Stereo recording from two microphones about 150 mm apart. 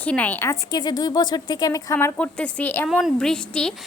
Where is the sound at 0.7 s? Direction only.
25° left (ahead or behind).